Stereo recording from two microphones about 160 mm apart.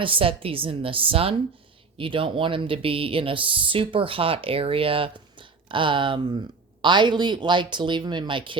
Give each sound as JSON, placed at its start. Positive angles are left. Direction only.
{"t": 0.0, "sound": "speech", "side_deg": -35}